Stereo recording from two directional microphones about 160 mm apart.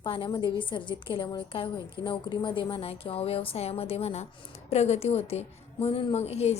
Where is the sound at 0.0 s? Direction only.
30° left (ahead or behind).